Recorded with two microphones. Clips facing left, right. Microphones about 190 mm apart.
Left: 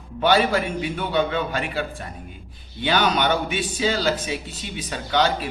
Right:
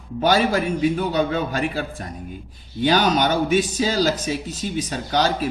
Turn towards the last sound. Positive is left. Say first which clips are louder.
# right 1 dB
turn(degrees=-40)  # may be behind; listen again after turning